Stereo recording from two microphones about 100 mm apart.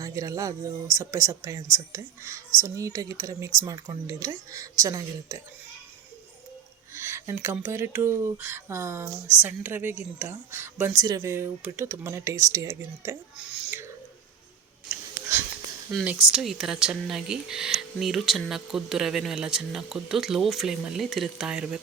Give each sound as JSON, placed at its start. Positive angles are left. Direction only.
{"t": 0.0, "sound": "speech", "side_deg": -35}
{"t": 6.9, "sound": "a sound", "side_deg": -25}
{"t": 7.7, "sound": "speech", "side_deg": -25}
{"t": 13.3, "sound": "a sound", "side_deg": -10}
{"t": 15.3, "sound": "speech", "side_deg": -25}
{"t": 16.3, "sound": "speech", "side_deg": -5}